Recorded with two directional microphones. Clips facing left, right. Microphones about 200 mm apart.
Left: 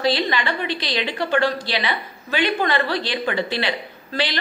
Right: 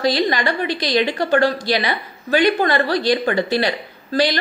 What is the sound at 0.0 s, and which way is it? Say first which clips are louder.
A woman's voice: right 3 dB; 40° right (ahead or behind).